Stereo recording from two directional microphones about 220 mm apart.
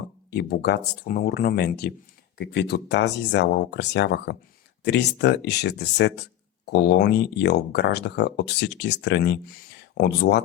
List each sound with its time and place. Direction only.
0.3 s speech: 50° left (ahead or behind)